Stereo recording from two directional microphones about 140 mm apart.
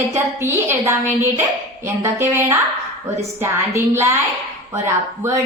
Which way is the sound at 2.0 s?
20° right (ahead or behind).